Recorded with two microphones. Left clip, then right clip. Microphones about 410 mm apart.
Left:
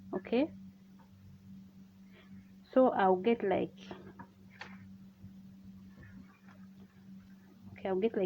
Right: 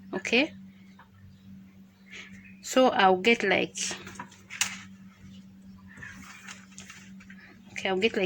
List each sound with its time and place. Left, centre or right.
0.1 s speech: left
2.6 s a woman's voice: left
7.7 s speech: left